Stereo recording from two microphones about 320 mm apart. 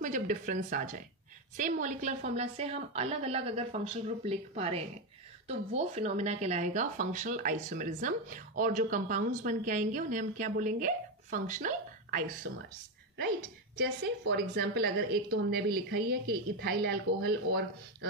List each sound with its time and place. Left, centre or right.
0.0 s speech: right
14.3 s speech: right